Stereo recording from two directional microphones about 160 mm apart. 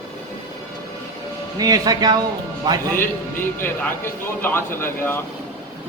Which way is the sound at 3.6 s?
15° left (ahead or behind).